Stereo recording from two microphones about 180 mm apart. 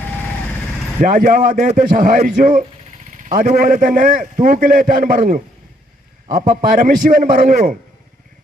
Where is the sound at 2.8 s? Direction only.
40° right (ahead or behind).